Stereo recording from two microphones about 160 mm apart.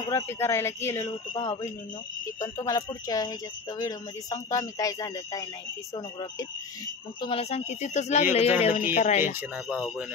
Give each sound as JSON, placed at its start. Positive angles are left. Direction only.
{"t": 0.1, "sound": "speech", "side_deg": 15}
{"t": 7.2, "sound": "speech", "side_deg": 35}
{"t": 9.2, "sound": "speech", "side_deg": -10}